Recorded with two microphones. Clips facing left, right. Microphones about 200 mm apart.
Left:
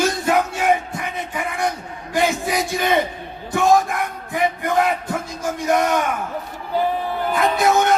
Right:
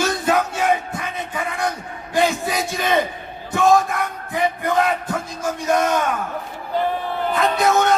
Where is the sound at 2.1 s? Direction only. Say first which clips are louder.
Even; 20° left (ahead or behind).